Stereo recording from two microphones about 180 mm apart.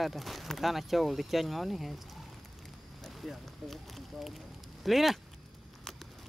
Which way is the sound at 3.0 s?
Centre (ahead or behind).